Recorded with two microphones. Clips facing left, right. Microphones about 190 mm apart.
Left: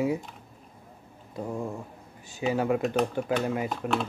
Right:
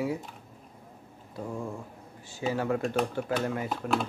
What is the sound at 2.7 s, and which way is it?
Speech, 5° left (ahead or behind).